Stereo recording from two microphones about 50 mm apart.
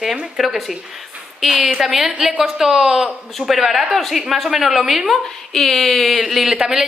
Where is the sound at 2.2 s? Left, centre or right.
Centre.